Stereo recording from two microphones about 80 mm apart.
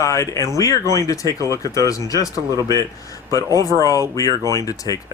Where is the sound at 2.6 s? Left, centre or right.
Right.